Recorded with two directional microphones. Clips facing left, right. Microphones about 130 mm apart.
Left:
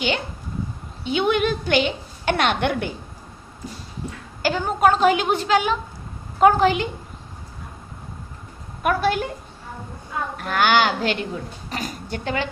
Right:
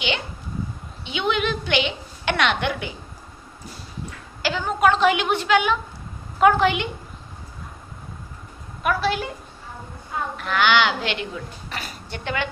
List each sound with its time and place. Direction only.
1.0 s a woman's voice: 45° left (ahead or behind)
4.4 s a woman's voice: 45° left (ahead or behind)
8.8 s a woman's voice: 50° left (ahead or behind)
10.3 s a woman's voice: 45° left (ahead or behind)